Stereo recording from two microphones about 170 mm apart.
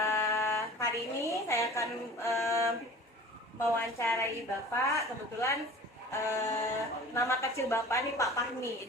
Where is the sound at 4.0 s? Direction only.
15° left (ahead or behind).